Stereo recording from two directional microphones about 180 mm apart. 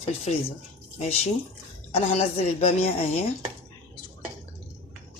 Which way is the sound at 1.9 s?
35° left (ahead or behind).